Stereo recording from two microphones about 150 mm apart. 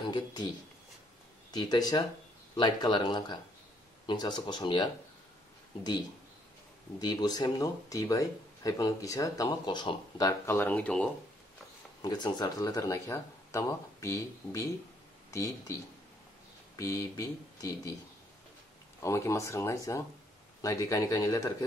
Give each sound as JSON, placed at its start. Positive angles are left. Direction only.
{"t": 0.1, "sound": "speech", "side_deg": 30}
{"t": 1.5, "sound": "speech", "side_deg": 25}
{"t": 7.0, "sound": "speech", "side_deg": 25}
{"t": 12.0, "sound": "speech", "side_deg": 25}
{"t": 18.9, "sound": "speech", "side_deg": 20}